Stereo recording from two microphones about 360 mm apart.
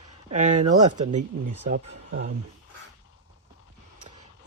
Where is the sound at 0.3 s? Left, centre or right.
Centre.